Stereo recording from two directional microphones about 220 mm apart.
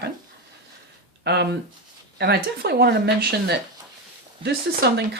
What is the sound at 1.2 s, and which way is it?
Speech, 50° right (ahead or behind).